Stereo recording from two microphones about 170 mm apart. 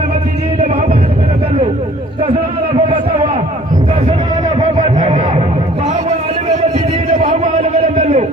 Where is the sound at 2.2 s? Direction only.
35° right (ahead or behind).